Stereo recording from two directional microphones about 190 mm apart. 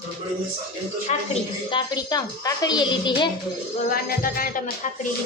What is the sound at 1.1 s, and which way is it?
Speech, 35° left (ahead or behind).